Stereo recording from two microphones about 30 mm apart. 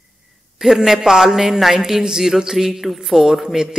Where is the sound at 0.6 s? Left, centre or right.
Centre.